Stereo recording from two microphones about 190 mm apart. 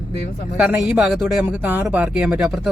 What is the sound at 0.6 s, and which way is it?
Speech, 5° right (ahead or behind).